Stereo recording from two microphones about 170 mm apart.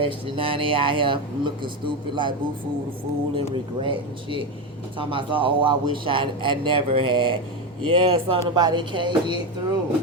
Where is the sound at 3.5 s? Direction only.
30° right (ahead or behind).